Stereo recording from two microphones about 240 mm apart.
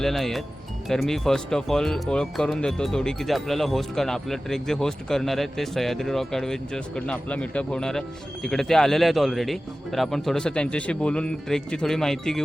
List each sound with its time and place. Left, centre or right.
0.0 s speech: centre